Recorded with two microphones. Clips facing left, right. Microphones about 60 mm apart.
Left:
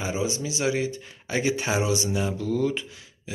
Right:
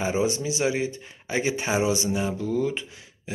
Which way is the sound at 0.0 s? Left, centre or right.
Right.